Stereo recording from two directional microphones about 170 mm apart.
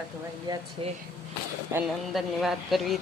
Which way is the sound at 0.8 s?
30° right (ahead or behind).